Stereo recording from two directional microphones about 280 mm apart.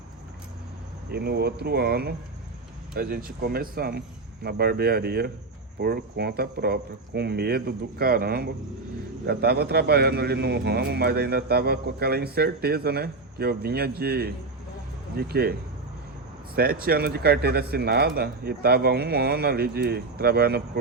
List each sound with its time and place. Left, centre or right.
1.1 s a man's voice: right
16.6 s a man's voice: right